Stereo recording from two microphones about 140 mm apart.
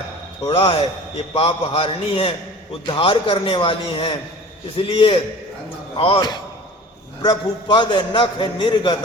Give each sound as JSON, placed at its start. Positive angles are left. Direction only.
{"t": 0.4, "sound": "a man's voice", "side_deg": 40}
{"t": 6.1, "sound": "a man's voice", "side_deg": 30}